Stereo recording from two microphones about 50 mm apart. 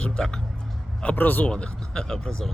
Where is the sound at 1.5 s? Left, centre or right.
Centre.